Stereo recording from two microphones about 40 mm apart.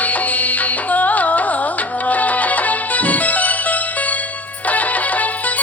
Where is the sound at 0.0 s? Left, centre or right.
Left.